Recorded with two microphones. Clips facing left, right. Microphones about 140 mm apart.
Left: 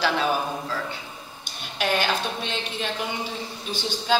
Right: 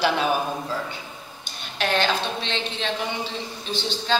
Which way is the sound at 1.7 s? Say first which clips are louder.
Right 1 dB; 10° left (ahead or behind).